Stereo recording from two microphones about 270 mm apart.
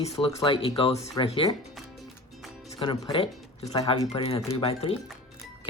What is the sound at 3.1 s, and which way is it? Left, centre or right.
Speech, centre.